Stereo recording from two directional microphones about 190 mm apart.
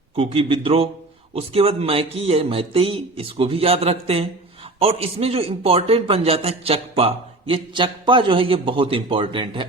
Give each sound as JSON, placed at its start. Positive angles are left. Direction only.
{"t": 0.2, "sound": "a man's voice", "side_deg": -30}